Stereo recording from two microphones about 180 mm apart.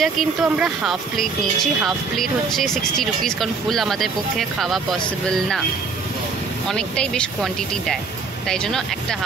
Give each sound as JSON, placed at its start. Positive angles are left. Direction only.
{"t": 0.0, "sound": "speech", "side_deg": 0}
{"t": 6.7, "sound": "speech", "side_deg": 5}